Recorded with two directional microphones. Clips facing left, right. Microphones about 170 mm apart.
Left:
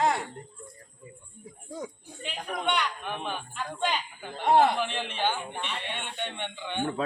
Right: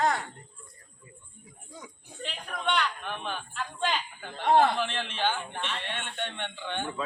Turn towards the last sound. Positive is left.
turn(degrees=15)  # may be behind; listen again after turning